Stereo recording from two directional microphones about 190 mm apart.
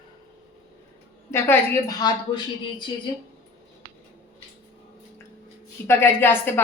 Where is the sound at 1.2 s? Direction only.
10° left (ahead or behind).